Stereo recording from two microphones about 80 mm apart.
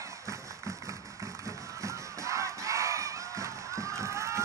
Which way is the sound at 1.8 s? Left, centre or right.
Right.